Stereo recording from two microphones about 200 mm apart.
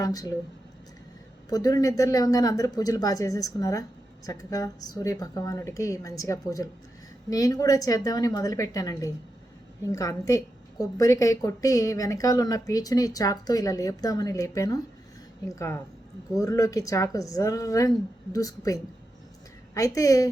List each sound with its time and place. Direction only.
0.0 s a woman's voice: 20° left (ahead or behind)
1.5 s a woman's voice: 20° left (ahead or behind)